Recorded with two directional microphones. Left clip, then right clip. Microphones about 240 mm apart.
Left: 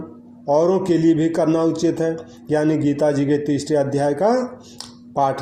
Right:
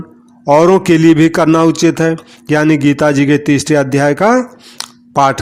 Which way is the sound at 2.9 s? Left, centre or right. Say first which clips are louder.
Right 7 dB; right.